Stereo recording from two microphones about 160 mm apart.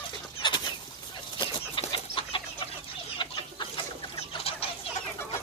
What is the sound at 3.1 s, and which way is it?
Chicken, 30° left (ahead or behind).